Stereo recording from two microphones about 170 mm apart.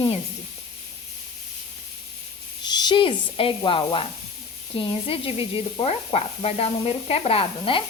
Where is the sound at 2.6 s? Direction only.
25° left (ahead or behind).